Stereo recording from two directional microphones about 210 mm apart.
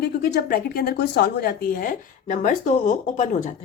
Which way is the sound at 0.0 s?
45° left (ahead or behind).